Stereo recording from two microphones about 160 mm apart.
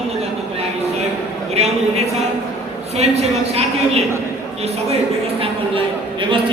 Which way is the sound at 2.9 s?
40° right (ahead or behind).